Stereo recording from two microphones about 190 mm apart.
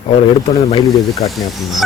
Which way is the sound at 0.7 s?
20° left (ahead or behind).